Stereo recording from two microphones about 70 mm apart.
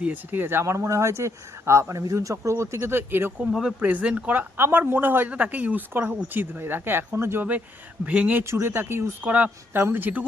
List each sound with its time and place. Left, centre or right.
0.0 s speech: right
3.8 s speech: right
8.0 s speech: centre
8.4 s speech: right